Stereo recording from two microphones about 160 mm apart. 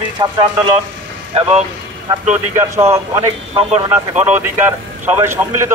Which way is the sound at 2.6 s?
15° right (ahead or behind).